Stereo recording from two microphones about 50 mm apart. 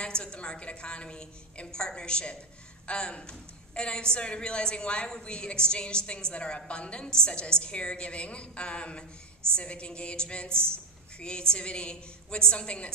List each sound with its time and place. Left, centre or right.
0.0 s a woman's voice: centre